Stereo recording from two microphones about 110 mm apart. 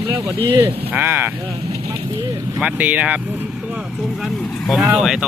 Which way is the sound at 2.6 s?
15° right (ahead or behind).